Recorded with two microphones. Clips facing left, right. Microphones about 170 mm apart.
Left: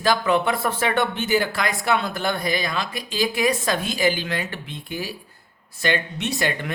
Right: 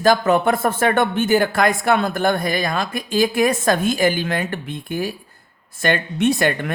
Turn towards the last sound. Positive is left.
turn(degrees=-50)  # may be behind; listen again after turning